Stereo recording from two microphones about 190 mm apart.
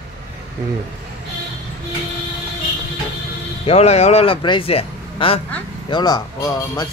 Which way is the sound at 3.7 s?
35° left (ahead or behind).